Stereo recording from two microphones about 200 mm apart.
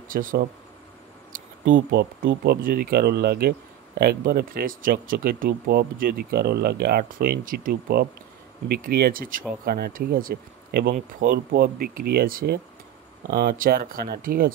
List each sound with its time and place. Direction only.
0.1 s speech: 45° right (ahead or behind)
1.3 s a sound: 45° right (ahead or behind)
1.9 s speech: 50° right (ahead or behind)